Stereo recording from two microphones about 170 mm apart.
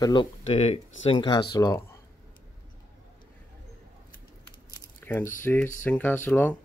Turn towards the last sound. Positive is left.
turn(degrees=10)  # may be behind; listen again after turning